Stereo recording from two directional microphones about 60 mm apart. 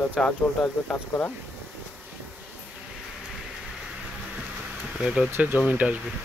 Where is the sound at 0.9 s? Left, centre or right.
Left.